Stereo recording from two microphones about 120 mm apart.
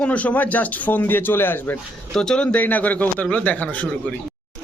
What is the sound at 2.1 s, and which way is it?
Speech, 5° left (ahead or behind).